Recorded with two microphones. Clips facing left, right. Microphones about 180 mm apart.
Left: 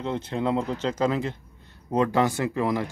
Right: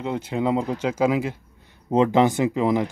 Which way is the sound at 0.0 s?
10° right (ahead or behind).